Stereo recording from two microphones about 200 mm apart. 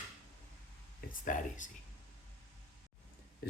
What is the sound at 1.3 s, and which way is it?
Speech, 40° left (ahead or behind).